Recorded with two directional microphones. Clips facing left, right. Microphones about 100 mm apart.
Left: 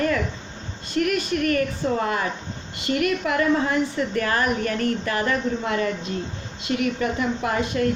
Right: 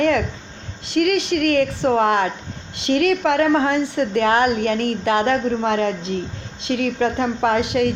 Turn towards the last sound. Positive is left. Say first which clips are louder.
# right 5 dB
turn(degrees=-90)